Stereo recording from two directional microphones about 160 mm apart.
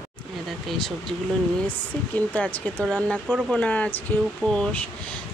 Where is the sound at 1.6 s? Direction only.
10° left (ahead or behind).